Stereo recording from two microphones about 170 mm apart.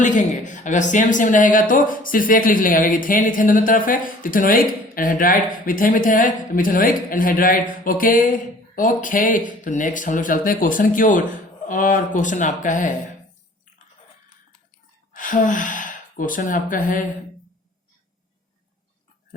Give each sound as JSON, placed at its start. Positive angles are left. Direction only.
{"t": 0.0, "sound": "speech", "side_deg": 45}
{"t": 15.1, "sound": "speech", "side_deg": 50}